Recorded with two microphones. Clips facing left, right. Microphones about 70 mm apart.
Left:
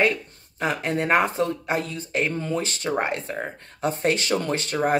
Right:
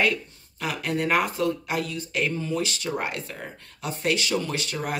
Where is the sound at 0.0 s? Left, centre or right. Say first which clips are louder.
Left 2 dB; left.